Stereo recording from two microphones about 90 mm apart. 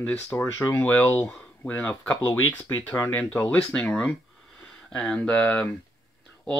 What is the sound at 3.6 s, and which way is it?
Speech, 5° left (ahead or behind).